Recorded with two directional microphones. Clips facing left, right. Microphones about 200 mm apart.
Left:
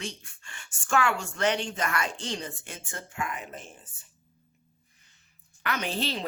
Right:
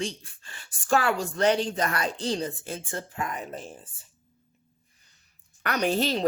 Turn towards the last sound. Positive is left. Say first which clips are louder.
# right 6 dB
turn(degrees=-45)  # may be behind; listen again after turning